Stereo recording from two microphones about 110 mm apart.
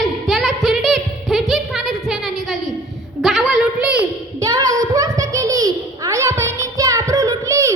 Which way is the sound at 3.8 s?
10° right (ahead or behind).